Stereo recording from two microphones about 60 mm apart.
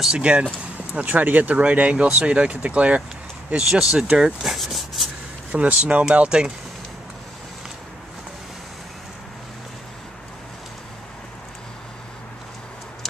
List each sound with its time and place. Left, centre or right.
0.2 s speech: right; by 5.1 s centre
5.5 s speech: right